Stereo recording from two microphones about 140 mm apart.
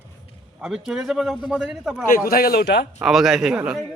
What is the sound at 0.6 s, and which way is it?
A man's voice, 5° right (ahead or behind).